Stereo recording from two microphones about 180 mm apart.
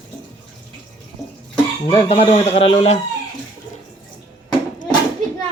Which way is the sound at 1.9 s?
30° left (ahead or behind).